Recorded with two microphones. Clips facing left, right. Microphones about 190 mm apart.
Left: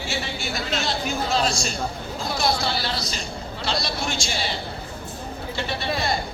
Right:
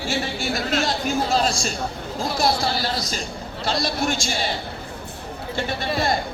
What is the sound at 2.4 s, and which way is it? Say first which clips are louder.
A woman's voice: right 2 dB; 45° right (ahead or behind).